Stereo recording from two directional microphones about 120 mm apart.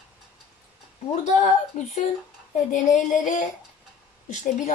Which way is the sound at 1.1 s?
70° left (ahead or behind).